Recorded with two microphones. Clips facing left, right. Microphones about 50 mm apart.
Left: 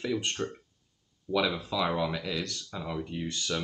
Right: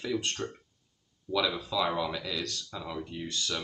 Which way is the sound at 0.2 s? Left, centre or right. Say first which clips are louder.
Left 2 dB; centre.